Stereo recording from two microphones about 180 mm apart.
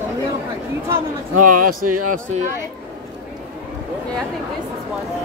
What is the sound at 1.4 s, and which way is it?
Speech, 50° right (ahead or behind).